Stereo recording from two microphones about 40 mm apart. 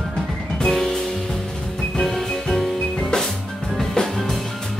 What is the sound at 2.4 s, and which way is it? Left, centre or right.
Music, centre.